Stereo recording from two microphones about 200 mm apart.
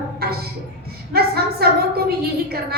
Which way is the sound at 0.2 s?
50° right (ahead or behind).